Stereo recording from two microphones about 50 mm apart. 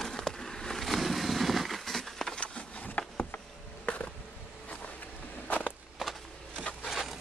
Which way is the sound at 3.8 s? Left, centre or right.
Left.